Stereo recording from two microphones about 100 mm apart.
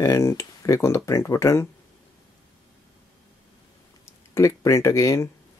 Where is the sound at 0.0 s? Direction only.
30° left (ahead or behind).